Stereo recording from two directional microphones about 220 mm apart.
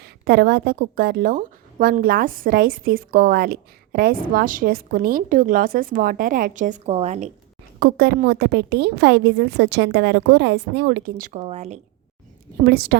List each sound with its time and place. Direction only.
0.0 s a woman's voice: 45° right (ahead or behind); by 7.3 s 30° right (ahead or behind)
7.8 s a woman's voice: 45° right (ahead or behind)
12.6 s a woman's voice: 45° right (ahead or behind)